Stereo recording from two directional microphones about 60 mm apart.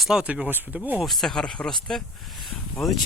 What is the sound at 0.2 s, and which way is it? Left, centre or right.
Speech, centre.